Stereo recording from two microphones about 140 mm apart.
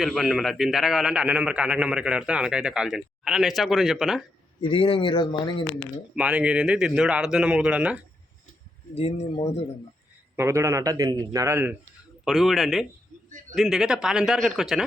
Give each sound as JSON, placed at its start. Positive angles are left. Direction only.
{"t": 0.0, "sound": "a man's voice", "side_deg": 0}
{"t": 4.6, "sound": "speech", "side_deg": 40}
{"t": 6.1, "sound": "speech", "side_deg": -10}
{"t": 9.0, "sound": "speech", "side_deg": 45}
{"t": 10.3, "sound": "a man's voice", "side_deg": -20}
{"t": 12.2, "sound": "a man's voice", "side_deg": 0}